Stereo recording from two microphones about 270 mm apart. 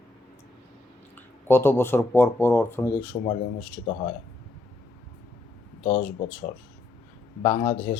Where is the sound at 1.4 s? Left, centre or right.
Centre.